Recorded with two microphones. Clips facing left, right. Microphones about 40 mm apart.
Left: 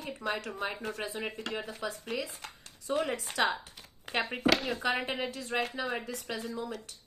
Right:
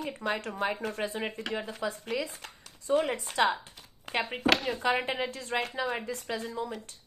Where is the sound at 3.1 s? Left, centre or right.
Right.